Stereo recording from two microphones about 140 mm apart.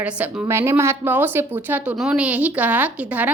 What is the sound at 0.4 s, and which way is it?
A woman's voice, 20° right (ahead or behind).